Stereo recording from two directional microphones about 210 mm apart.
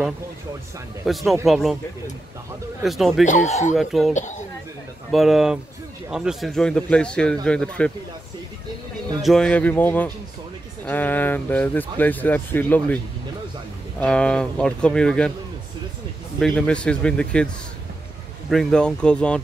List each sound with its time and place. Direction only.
1.0 s a man's voice: centre (ahead or behind)
2.8 s a man's voice: centre (ahead or behind)
3.3 s speech: 35° left (ahead or behind)
3.7 s a man's voice: centre (ahead or behind)
4.1 s speech: 35° left (ahead or behind)
5.1 s a man's voice: centre (ahead or behind)
9.2 s a man's voice: centre (ahead or behind)
16.3 s a man's voice: 5° left (ahead or behind)
18.5 s a man's voice: centre (ahead or behind)